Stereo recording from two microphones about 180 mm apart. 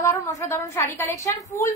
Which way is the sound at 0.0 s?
15° left (ahead or behind).